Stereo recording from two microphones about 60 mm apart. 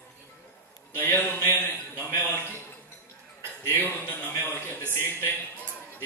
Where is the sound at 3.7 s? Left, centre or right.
Left.